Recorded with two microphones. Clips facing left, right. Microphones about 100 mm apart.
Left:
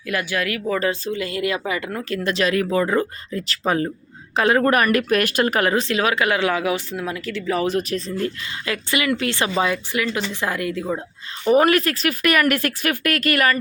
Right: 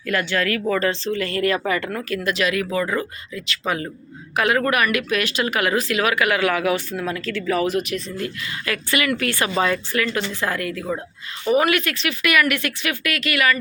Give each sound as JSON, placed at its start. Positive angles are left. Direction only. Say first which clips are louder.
{"t": 0.0, "sound": "speech", "louder": "right 2 dB", "side_deg": 15}
{"t": 2.0, "sound": "speech", "louder": "left 2 dB", "side_deg": 25}
{"t": 8.6, "sound": "speech", "louder": "even", "side_deg": 20}
{"t": 11.4, "sound": "speech", "louder": "left 3 dB", "side_deg": 40}